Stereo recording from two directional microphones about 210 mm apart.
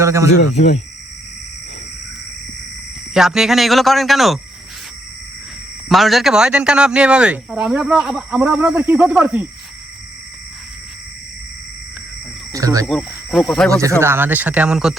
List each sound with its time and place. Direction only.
0.0 s speech: 15° right (ahead or behind)
3.2 s speech: centre (ahead or behind)
5.9 s speech: centre (ahead or behind)
12.5 s speech: 15° right (ahead or behind)
12.9 s speech: centre (ahead or behind)
13.7 s speech: 15° right (ahead or behind)